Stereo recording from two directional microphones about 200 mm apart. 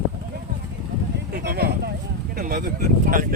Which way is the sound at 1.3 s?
50° right (ahead or behind).